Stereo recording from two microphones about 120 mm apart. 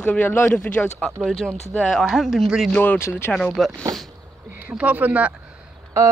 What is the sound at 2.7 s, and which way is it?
Speech, 15° left (ahead or behind).